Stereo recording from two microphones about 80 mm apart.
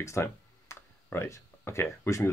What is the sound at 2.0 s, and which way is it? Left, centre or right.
Speech, left.